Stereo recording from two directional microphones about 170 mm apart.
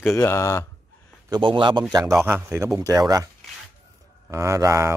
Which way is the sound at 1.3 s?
30° right (ahead or behind).